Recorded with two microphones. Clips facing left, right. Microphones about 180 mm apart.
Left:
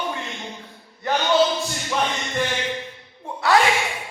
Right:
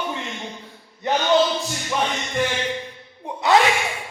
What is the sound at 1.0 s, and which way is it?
Speech, 20° right (ahead or behind).